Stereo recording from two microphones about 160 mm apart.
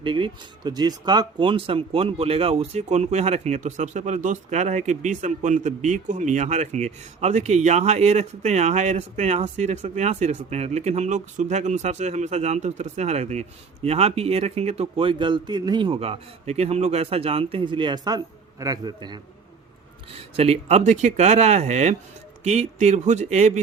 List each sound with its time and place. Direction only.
0.0 s a man's voice: 30° right (ahead or behind)
20.1 s speech: 40° right (ahead or behind)